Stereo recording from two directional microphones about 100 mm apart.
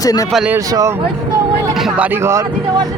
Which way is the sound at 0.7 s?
35° right (ahead or behind).